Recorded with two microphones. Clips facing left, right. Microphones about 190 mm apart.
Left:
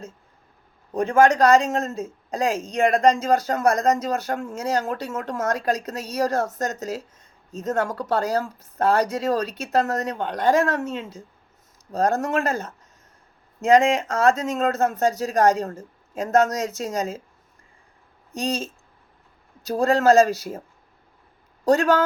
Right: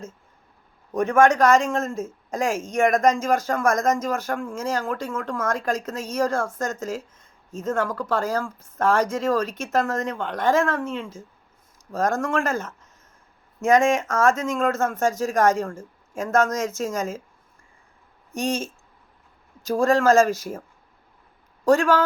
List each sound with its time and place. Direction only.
0.9 s speech: 35° left (ahead or behind)
4.8 s speech: 20° left (ahead or behind)
5.3 s speech: 40° left (ahead or behind)
18.3 s speech: 35° left (ahead or behind)
21.6 s a man's voice: 40° left (ahead or behind)